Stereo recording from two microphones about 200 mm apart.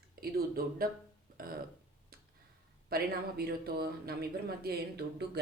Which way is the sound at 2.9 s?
50° right (ahead or behind).